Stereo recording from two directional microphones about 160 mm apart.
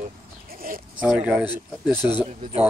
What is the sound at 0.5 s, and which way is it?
Sheep, 65° right (ahead or behind).